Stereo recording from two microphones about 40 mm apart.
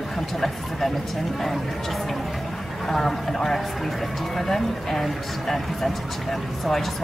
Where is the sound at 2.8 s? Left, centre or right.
Centre.